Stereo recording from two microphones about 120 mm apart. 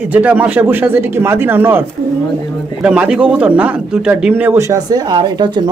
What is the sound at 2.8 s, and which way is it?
Speech, 10° right (ahead or behind).